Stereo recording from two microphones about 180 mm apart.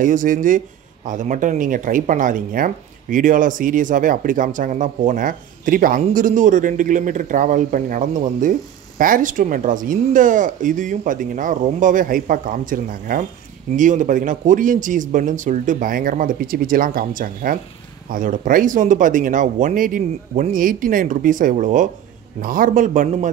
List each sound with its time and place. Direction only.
0.0 s speech: 45° right (ahead or behind)